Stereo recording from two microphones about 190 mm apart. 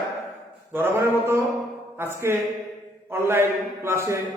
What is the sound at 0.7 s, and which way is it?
A man's voice, 10° right (ahead or behind).